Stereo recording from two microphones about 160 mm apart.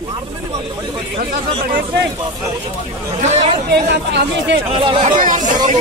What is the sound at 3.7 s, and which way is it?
Speech, 90° right.